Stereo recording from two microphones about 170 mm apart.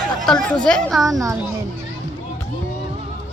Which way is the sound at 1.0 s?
20° right (ahead or behind).